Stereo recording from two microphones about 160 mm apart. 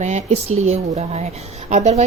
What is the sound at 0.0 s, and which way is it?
A woman's voice, 45° right (ahead or behind).